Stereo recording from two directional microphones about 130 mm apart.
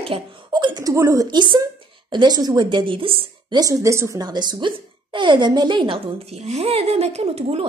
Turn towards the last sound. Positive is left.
turn(degrees=-50)  # may be behind; listen again after turning